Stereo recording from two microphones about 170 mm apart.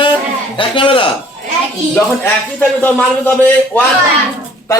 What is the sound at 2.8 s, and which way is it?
Speech, 10° left (ahead or behind).